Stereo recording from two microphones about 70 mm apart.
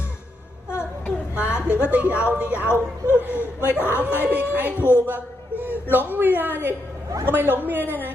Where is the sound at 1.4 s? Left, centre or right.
Left.